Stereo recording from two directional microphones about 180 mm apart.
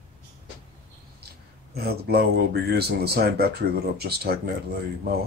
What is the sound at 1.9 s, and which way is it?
Speech, 60° right (ahead or behind).